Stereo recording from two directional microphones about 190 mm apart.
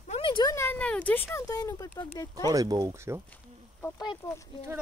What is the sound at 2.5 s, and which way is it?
Speech, 20° right (ahead or behind).